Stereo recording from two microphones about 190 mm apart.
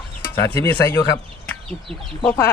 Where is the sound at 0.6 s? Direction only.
15° left (ahead or behind).